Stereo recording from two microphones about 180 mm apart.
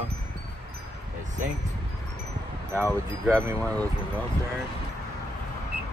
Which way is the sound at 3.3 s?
15° right (ahead or behind).